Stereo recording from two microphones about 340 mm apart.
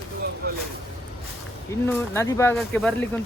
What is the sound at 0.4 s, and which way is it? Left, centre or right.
Speech, right.